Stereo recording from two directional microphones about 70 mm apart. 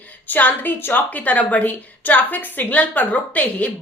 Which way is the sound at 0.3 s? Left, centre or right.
Left.